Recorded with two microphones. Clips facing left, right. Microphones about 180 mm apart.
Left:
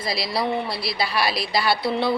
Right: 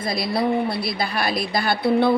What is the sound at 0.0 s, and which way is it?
A woman's voice, 50° right (ahead or behind).